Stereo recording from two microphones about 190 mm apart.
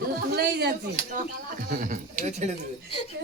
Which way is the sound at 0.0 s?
55° right (ahead or behind).